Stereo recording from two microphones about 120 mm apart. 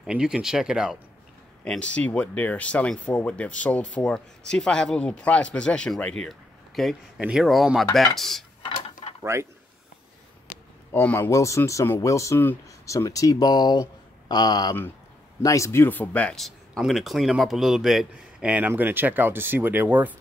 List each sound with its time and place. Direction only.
0.0 s speech: 5° right (ahead or behind)
1.6 s speech: 10° left (ahead or behind)
9.2 s speech: 25° right (ahead or behind)
10.9 s speech: 20° left (ahead or behind); by 20.2 s 15° right (ahead or behind)